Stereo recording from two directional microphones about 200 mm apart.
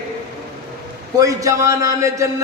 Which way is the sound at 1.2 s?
15° right (ahead or behind).